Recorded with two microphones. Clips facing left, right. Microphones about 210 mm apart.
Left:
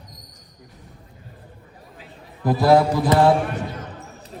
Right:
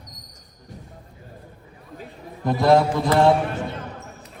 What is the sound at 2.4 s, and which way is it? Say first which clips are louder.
Speech: left 1 dB; centre (ahead or behind).